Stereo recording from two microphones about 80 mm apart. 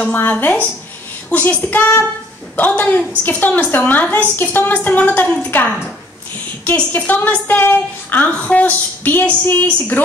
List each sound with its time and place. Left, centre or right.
0.0 s a woman's voice: left